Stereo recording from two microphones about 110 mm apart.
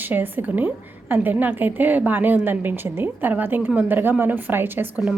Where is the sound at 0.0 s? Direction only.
15° right (ahead or behind).